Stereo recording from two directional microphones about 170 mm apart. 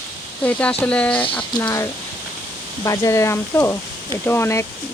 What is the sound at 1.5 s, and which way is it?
Speech, 20° left (ahead or behind).